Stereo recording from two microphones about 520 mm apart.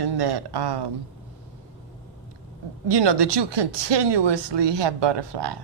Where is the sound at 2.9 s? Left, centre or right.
Right.